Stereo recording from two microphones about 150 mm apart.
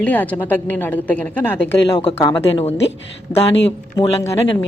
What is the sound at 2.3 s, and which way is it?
Speech, 45° left (ahead or behind).